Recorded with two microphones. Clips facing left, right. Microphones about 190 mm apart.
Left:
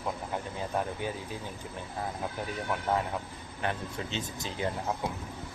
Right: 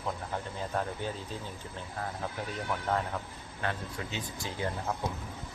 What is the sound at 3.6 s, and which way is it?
Speech, 20° left (ahead or behind).